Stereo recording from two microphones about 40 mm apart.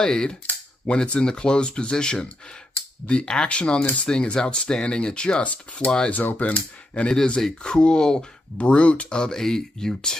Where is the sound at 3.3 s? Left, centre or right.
Left.